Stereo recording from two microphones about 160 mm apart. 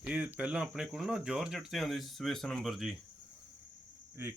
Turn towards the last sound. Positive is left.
turn(degrees=-15)  # may be behind; listen again after turning